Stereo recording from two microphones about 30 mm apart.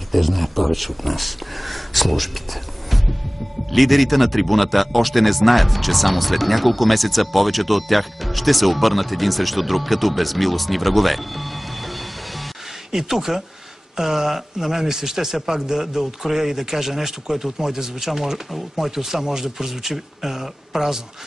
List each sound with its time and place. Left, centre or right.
0.1 s speech: centre
3.7 s speech: centre
12.9 s speech: centre